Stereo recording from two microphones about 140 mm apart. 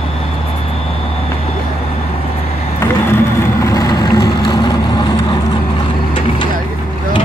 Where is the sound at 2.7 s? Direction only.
20° left (ahead or behind).